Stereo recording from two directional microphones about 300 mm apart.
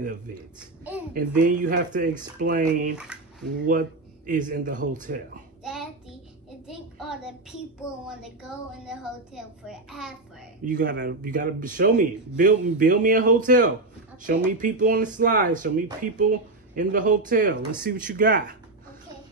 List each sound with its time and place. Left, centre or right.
1.1 s speech: right
3.0 s a sound: centre
4.3 s speech: right
5.6 s child singing: centre
6.7 s a child's voice: centre
10.6 s speech: right